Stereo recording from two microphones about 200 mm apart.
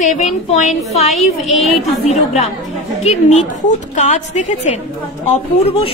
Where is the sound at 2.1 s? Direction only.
35° left (ahead or behind).